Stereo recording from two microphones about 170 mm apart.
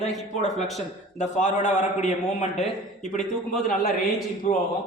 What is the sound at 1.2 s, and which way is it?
A man's voice, 45° left (ahead or behind).